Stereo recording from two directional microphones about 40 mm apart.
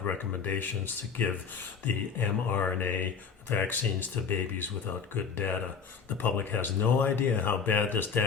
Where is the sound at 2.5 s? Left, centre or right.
Left.